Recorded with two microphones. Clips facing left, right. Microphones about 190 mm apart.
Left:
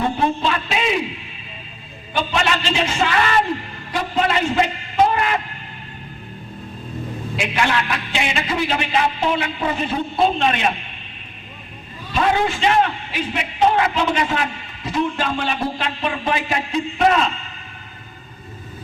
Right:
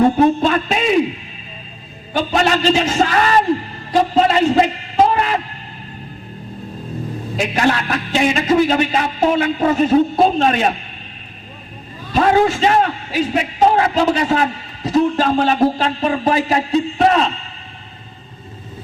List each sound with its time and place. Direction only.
0.2 s a man's voice: 45° right (ahead or behind)
2.1 s a man's voice: 40° right (ahead or behind)
7.3 s a man's voice: 40° right (ahead or behind)
12.1 s a man's voice: 40° right (ahead or behind)